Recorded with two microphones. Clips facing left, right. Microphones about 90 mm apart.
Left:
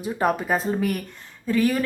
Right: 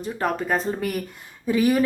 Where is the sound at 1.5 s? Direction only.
15° right (ahead or behind).